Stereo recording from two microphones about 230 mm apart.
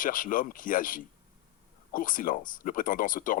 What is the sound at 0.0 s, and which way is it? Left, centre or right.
Speech, left.